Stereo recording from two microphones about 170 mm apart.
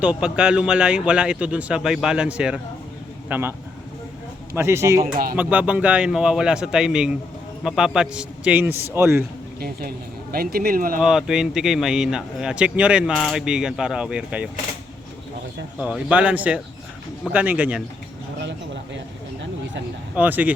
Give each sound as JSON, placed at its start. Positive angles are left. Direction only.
{"t": 0.0, "sound": "a man's voice", "side_deg": -5}
{"t": 4.5, "sound": "a man's voice", "side_deg": -15}
{"t": 5.1, "sound": "speech", "side_deg": -60}
{"t": 5.4, "sound": "a man's voice", "side_deg": -10}
{"t": 10.3, "sound": "speech", "side_deg": -65}
{"t": 11.0, "sound": "a man's voice", "side_deg": -5}
{"t": 15.8, "sound": "a man's voice", "side_deg": -5}
{"t": 20.1, "sound": "a man's voice", "side_deg": -10}